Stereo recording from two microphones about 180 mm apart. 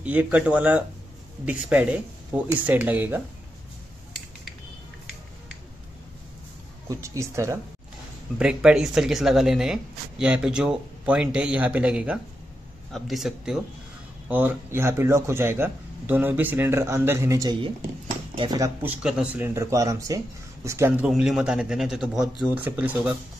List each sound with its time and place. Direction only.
0.0 s speech: 10° right (ahead or behind)
6.9 s speech: 15° right (ahead or behind)
8.4 s speech: 5° right (ahead or behind); by 18.7 s 25° right (ahead or behind)
18.8 s speech: 5° right (ahead or behind)
21.1 s speech: 5° right (ahead or behind)